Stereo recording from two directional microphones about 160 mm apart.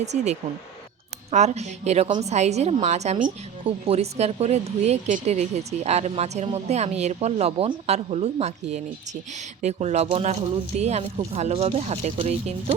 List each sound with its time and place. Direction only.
0.0 s speech: 45° right (ahead or behind)